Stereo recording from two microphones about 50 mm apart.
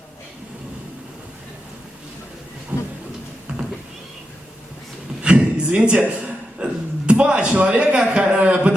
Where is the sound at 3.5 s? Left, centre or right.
Centre.